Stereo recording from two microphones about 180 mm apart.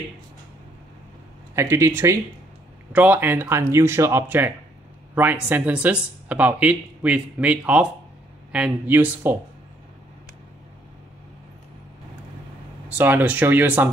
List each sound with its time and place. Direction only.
1.5 s speech: 15° right (ahead or behind)
12.8 s speech: 10° right (ahead or behind)